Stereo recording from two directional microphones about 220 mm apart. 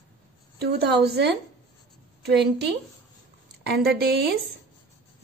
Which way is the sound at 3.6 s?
50° right (ahead or behind).